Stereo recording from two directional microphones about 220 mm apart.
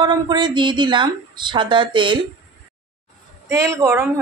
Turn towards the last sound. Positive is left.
turn(degrees=-10)  # may be behind; listen again after turning